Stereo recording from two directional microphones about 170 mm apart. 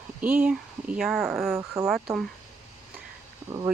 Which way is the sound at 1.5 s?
20° right (ahead or behind).